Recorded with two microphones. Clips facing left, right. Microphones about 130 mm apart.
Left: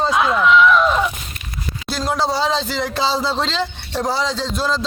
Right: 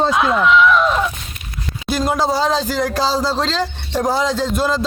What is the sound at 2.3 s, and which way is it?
A man's voice, 5° right (ahead or behind).